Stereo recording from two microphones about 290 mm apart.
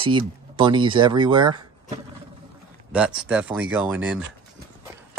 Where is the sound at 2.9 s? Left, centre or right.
Centre.